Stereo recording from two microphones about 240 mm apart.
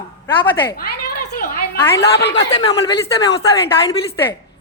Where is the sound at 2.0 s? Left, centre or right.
Left.